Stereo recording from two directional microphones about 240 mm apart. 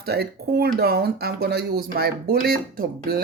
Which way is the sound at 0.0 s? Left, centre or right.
Right.